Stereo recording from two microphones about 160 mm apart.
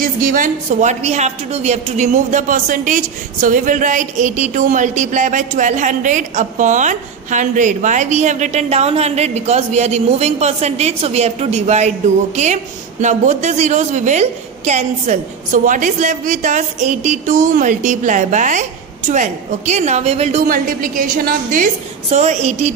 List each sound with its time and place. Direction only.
0.0 s a woman's voice: 60° right (ahead or behind)
13.0 s a woman's voice: 45° right (ahead or behind)
20.4 s a woman's voice: 60° right (ahead or behind)
22.1 s a woman's voice: 45° right (ahead or behind)